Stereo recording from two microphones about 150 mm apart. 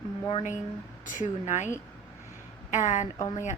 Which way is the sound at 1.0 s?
55° left (ahead or behind).